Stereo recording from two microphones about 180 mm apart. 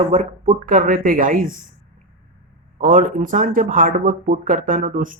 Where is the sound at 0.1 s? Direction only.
40° right (ahead or behind).